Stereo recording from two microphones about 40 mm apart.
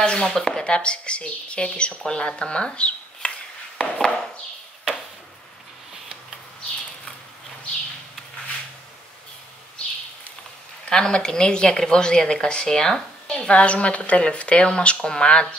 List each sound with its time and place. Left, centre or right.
0.2 s speech: centre
0.6 s speech: left
3.7 s chop: centre
10.9 s a woman's voice: centre